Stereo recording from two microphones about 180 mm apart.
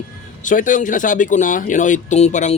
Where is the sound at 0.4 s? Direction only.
45° left (ahead or behind).